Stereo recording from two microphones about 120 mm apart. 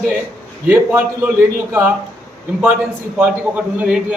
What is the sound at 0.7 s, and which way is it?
A man's voice, 15° right (ahead or behind).